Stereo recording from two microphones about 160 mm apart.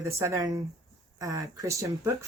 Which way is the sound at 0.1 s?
15° right (ahead or behind).